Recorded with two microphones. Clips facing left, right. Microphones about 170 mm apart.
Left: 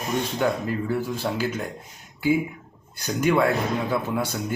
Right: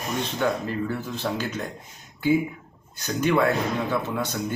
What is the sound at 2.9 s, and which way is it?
Speech, 10° left (ahead or behind).